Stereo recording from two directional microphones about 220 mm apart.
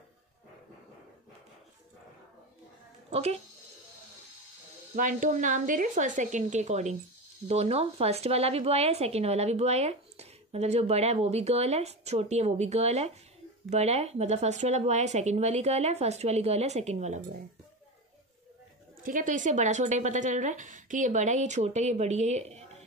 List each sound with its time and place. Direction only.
3.1 s speech: 30° right (ahead or behind)
4.9 s a woman's voice: 35° right (ahead or behind)
19.0 s a woman's voice: 35° right (ahead or behind)